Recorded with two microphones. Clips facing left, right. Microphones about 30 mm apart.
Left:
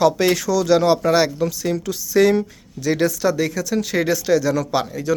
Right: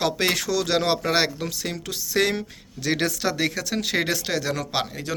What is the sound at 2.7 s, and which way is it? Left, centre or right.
Speech, right.